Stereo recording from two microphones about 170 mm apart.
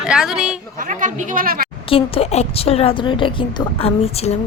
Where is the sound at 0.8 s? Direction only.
50° right (ahead or behind).